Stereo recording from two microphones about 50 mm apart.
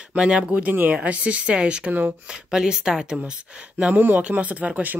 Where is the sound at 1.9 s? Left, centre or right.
Right.